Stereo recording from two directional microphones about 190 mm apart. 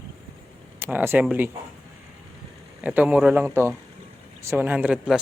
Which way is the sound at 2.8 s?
5° right (ahead or behind).